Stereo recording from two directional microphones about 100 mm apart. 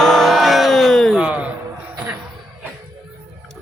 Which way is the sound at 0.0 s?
5° left (ahead or behind).